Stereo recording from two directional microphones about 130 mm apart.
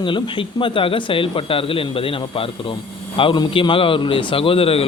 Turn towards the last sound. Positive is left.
turn(degrees=50)  # may be behind; listen again after turning